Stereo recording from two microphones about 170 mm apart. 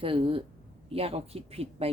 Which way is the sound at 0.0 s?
30° right (ahead or behind).